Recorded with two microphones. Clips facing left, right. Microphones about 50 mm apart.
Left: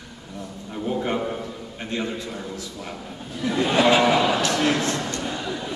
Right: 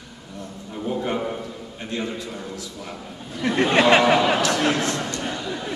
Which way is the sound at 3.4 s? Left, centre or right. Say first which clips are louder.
Right 2 dB; right.